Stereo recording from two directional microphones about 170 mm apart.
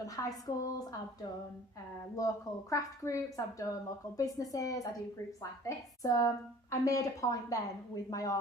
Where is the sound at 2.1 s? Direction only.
20° left (ahead or behind).